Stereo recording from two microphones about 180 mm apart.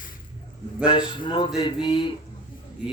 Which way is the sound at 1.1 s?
25° left (ahead or behind).